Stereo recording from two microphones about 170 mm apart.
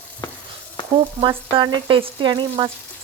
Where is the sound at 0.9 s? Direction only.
30° right (ahead or behind).